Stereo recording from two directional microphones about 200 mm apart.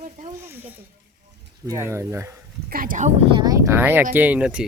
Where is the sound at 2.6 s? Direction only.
45° right (ahead or behind).